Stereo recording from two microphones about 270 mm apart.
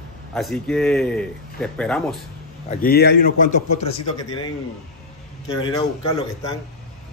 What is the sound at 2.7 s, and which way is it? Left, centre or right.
A man's voice, left.